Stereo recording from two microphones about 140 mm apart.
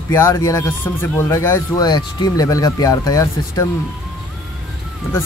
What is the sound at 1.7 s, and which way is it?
Speech, 30° left (ahead or behind).